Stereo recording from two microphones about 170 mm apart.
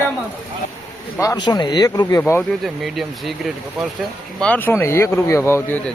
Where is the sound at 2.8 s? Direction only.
Centre (ahead or behind).